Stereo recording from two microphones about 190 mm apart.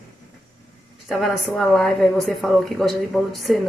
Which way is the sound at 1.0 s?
Centre (ahead or behind).